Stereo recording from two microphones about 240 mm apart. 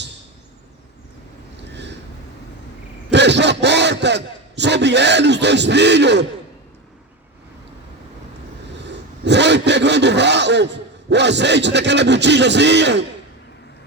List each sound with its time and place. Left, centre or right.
1.7 s vehicle: right
3.1 s a man's voice: right
8.8 s a sound: right